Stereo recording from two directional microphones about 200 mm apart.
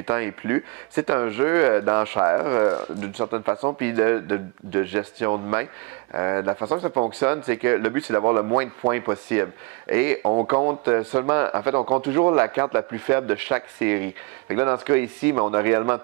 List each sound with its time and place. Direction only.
0.0 s speech: 15° right (ahead or behind)